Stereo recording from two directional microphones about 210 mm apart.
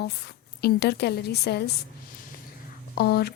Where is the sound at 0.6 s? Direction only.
50° left (ahead or behind).